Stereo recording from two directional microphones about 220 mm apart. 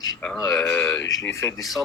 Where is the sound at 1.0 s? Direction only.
60° left (ahead or behind).